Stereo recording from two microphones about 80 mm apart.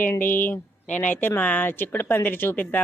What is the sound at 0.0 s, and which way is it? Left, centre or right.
Speech, left.